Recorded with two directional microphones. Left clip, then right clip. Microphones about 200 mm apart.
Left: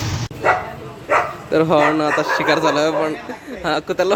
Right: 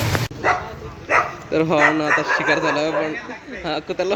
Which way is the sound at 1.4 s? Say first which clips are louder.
Left 3 dB; 5° left (ahead or behind).